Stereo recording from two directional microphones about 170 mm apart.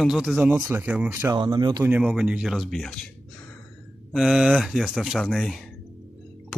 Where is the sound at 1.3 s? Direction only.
25° right (ahead or behind).